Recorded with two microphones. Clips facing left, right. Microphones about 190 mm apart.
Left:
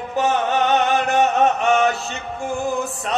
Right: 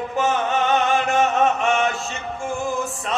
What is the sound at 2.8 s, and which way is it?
Music, 35° left (ahead or behind).